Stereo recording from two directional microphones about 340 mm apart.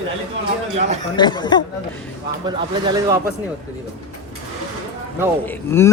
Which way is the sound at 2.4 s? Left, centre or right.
Centre.